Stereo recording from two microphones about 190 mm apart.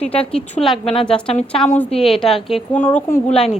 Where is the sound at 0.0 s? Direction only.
30° left (ahead or behind).